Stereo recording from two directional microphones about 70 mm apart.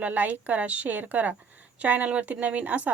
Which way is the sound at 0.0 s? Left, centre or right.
Right.